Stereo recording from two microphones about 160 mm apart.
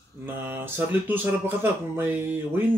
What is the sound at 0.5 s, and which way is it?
Speech, 10° right (ahead or behind).